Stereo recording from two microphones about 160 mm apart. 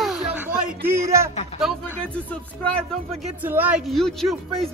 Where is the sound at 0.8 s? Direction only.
15° right (ahead or behind).